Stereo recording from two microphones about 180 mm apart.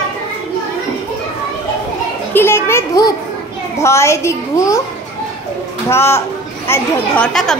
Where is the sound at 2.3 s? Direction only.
15° left (ahead or behind).